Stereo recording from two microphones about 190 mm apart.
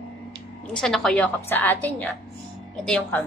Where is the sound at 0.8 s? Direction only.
Centre (ahead or behind).